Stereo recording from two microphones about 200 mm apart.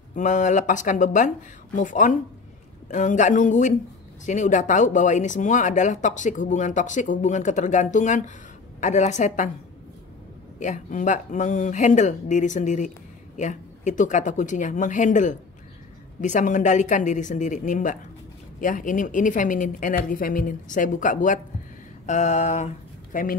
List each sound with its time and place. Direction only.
0.1 s speech: 40° left (ahead or behind)
10.6 s speech: 40° left (ahead or behind)